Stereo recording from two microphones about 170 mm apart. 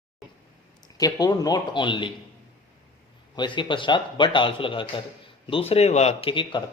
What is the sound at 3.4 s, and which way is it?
Speech, 30° left (ahead or behind).